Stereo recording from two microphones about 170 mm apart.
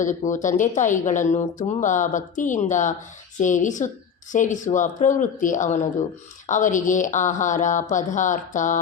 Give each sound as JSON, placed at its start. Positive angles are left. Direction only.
{"t": 0.0, "sound": "speech", "side_deg": 50}